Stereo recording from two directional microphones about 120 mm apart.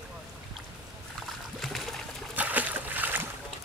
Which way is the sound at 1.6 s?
Centre (ahead or behind).